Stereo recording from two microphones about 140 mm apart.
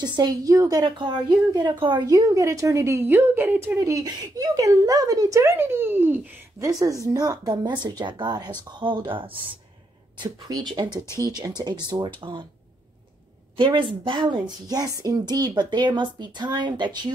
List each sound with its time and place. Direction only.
0.0 s a woman's voice: 30° right (ahead or behind)
13.6 s a woman's voice: 35° right (ahead or behind)